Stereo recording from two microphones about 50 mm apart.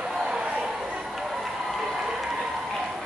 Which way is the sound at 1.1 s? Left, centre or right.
Centre.